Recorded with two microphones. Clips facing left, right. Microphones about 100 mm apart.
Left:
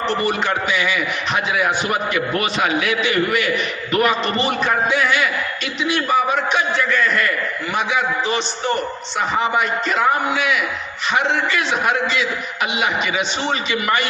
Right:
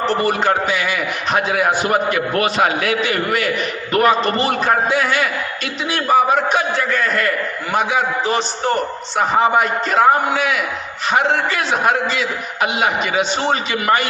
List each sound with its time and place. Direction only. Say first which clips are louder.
0.0 s a man's voice: right 3 dB; 40° right (ahead or behind)